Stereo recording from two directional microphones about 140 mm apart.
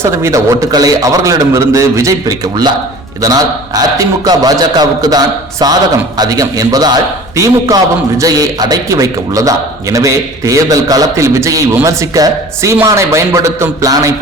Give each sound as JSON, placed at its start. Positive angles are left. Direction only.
{"t": 0.0, "sound": "a man's voice", "side_deg": -20}